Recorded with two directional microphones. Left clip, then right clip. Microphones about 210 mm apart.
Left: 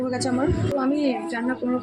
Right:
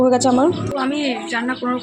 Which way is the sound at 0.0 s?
30° right (ahead or behind).